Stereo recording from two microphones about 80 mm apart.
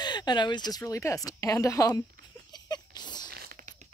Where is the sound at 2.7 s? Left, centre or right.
Left.